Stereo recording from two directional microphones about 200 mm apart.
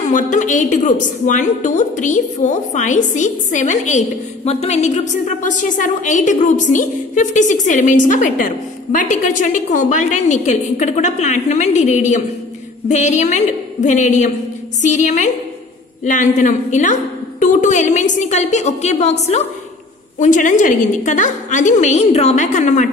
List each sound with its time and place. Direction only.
0.1 s a woman's voice: 40° left (ahead or behind)